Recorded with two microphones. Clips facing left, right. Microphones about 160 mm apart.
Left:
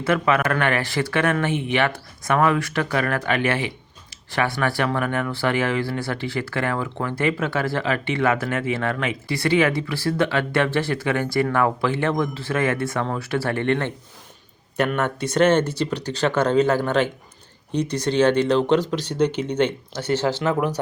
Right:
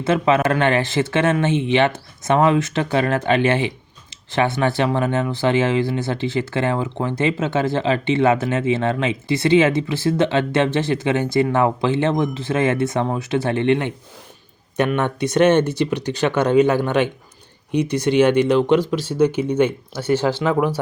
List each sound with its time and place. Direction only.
0.0 s speech: 25° right (ahead or behind)